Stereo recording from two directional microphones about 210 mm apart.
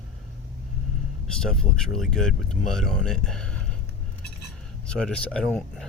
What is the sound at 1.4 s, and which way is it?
Speech, 5° left (ahead or behind).